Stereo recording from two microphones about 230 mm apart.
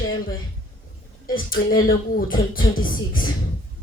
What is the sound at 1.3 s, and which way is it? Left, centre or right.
Speech, left.